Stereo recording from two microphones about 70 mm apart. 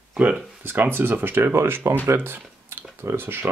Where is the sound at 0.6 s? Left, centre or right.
Right.